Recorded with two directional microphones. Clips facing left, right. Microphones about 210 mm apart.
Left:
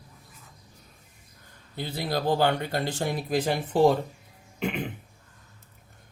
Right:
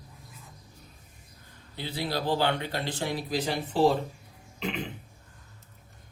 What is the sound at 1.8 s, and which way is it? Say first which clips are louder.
Speech: left 2 dB; 45° left (ahead or behind).